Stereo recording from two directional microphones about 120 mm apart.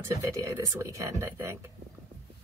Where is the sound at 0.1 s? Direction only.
25° right (ahead or behind).